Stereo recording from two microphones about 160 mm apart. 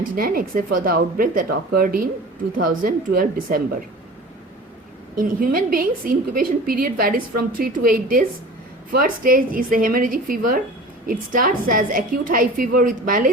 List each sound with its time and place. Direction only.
0.0 s a woman's voice: 65° right (ahead or behind)
5.1 s a woman's voice: 60° right (ahead or behind)